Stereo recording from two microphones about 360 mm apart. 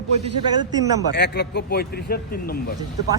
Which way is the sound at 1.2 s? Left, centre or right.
Left.